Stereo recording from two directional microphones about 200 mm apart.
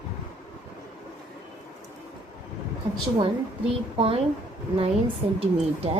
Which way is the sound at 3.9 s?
30° right (ahead or behind).